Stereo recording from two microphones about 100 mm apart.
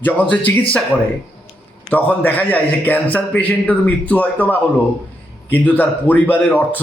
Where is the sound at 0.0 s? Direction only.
20° left (ahead or behind).